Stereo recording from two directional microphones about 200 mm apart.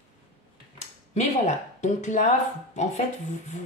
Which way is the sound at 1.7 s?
40° left (ahead or behind).